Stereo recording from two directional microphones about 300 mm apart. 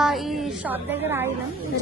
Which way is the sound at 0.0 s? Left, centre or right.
Centre.